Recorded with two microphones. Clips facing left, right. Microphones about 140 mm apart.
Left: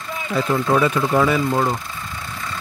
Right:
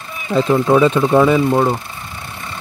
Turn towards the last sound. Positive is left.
turn(degrees=-30)  # may be behind; listen again after turning